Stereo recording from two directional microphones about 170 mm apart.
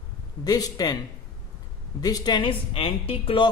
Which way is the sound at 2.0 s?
20° left (ahead or behind).